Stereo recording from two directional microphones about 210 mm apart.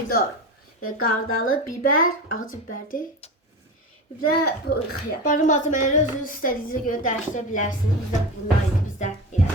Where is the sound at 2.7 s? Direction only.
40° left (ahead or behind).